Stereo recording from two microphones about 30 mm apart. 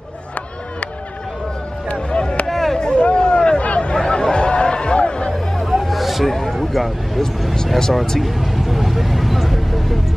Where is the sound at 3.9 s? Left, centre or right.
Left.